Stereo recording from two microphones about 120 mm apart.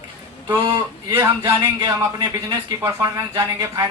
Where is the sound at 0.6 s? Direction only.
40° right (ahead or behind).